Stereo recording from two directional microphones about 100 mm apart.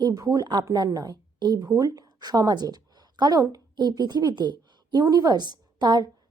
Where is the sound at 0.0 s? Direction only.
40° right (ahead or behind).